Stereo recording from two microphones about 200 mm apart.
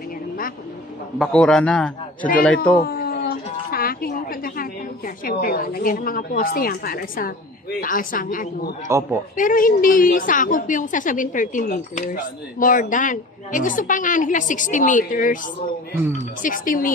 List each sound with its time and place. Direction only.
1.1 s a man's voice: centre (ahead or behind)
2.8 s a sound: 50° left (ahead or behind)
7.8 s a woman's voice: 45° left (ahead or behind)
8.8 s speech: 15° right (ahead or behind)
9.4 s a woman's voice: 45° left (ahead or behind)